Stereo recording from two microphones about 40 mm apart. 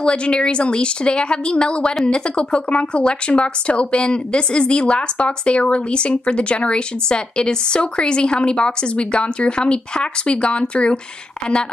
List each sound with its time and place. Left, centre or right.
0.0 s speech: left